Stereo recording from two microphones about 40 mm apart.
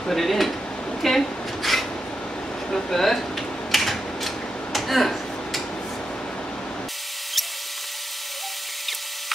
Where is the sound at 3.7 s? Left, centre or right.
Centre.